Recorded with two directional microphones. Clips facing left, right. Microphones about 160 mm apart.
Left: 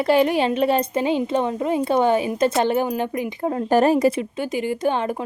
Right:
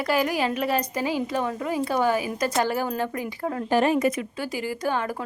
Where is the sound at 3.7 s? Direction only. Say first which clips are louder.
Left 5 dB; 40° left (ahead or behind).